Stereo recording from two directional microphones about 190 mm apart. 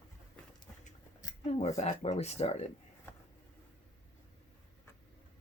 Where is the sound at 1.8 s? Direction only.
35° left (ahead or behind).